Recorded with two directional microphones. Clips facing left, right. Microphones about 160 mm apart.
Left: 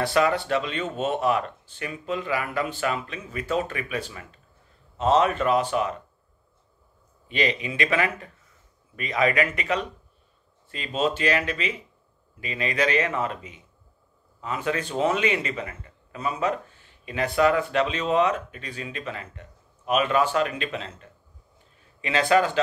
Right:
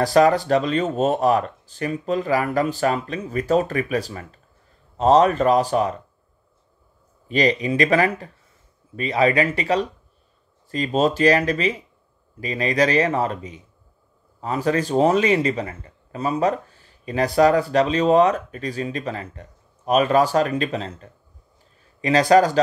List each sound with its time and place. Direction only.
0.0 s a man's voice: 40° right (ahead or behind)
7.2 s a man's voice: 40° right (ahead or behind)